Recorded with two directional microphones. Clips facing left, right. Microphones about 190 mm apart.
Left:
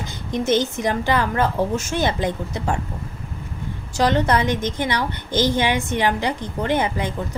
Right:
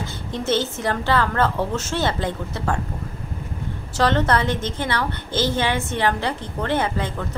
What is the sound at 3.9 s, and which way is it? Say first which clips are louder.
Speech: left 1 dB; 15° left (ahead or behind).